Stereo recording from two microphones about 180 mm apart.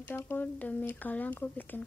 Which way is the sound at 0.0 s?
10° left (ahead or behind).